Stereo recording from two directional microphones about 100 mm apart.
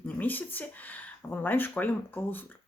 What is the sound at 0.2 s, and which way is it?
Speech, 15° left (ahead or behind).